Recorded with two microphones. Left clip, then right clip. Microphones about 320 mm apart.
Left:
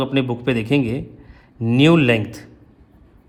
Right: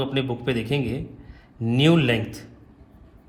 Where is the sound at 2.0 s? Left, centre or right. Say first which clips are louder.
Left 6 dB; left.